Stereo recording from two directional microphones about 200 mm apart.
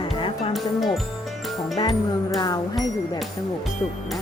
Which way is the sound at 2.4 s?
20° left (ahead or behind).